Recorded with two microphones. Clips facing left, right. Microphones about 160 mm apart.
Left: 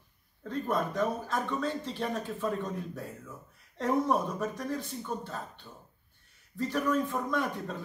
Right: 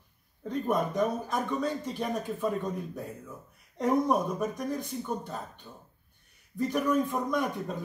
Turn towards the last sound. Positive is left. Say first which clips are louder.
# right 2 dB
turn(degrees=-15)  # may be behind; listen again after turning